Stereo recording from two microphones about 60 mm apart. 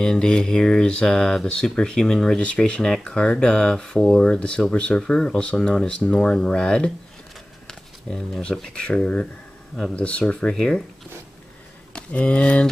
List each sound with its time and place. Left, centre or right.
0.0 s speech: centre
11.9 s speech: left